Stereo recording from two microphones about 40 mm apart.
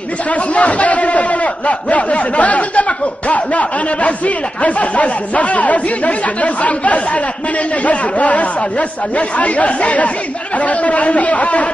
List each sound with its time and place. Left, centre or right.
0.3 s a man's voice: left